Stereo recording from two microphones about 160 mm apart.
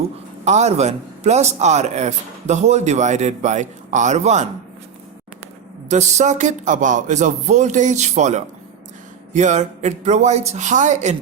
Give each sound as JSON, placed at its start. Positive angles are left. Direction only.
{"t": 0.4, "sound": "a man's voice", "side_deg": -45}
{"t": 5.9, "sound": "a man's voice", "side_deg": -45}